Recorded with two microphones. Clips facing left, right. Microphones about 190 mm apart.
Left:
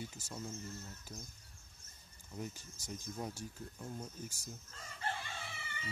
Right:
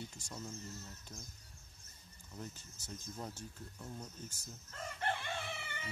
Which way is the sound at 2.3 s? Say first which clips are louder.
Left 4 dB; 10° left (ahead or behind).